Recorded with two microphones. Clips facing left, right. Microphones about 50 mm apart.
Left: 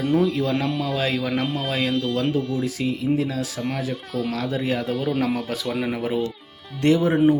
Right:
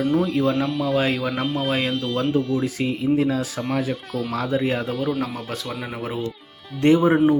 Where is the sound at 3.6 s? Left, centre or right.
Centre.